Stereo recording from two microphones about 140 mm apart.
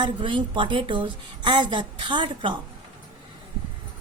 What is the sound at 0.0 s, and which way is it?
A woman's voice, 35° right (ahead or behind).